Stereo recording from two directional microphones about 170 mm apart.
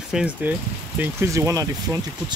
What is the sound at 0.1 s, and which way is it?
Speech, 5° right (ahead or behind).